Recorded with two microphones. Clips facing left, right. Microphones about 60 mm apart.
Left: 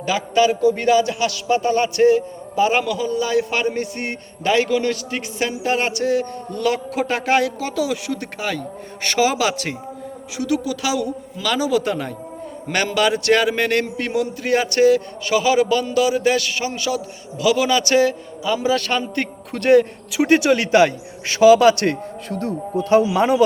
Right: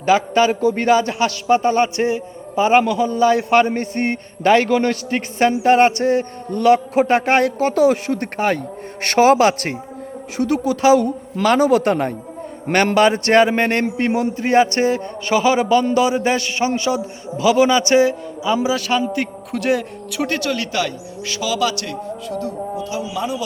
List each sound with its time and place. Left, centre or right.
0.0 s a man's voice: right
18.7 s a man's voice: centre
20.3 s speech: left